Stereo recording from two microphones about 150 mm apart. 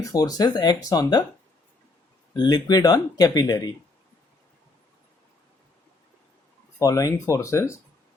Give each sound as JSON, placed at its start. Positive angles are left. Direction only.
{"t": 0.0, "sound": "speech", "side_deg": 25}
{"t": 2.3, "sound": "speech", "side_deg": 25}
{"t": 6.7, "sound": "speech", "side_deg": 20}